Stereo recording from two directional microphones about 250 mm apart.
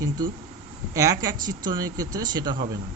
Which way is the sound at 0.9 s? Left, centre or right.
Centre.